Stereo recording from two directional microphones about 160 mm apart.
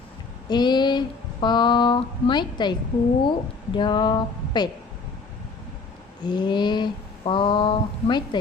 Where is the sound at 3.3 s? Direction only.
30° left (ahead or behind).